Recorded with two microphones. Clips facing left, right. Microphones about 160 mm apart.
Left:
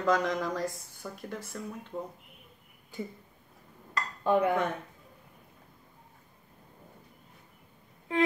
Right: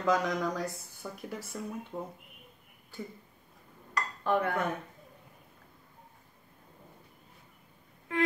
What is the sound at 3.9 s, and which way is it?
Dishes, 20° left (ahead or behind).